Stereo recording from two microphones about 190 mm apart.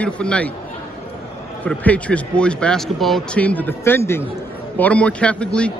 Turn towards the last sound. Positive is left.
turn(degrees=5)  # may be behind; listen again after turning